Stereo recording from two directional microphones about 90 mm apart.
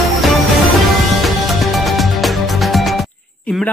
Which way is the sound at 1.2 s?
Centre (ahead or behind).